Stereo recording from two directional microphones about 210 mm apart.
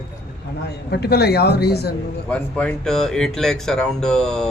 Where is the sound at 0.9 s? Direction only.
50° left (ahead or behind).